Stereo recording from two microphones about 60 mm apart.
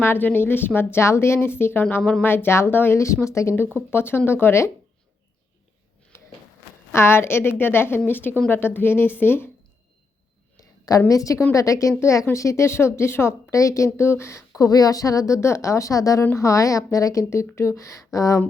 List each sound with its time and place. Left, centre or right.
0.0 s a woman's voice: left
3.0 s a woman's voice: left
3.9 s a woman's voice: left
6.1 s a sound: left
6.9 s a woman's voice: left
10.6 s a sound: left
11.1 s a woman's voice: left
13.5 s a woman's voice: left
14.6 s speech: left
15.4 s a woman's voice: left
16.3 s a woman's voice: left
17.5 s a woman's voice: left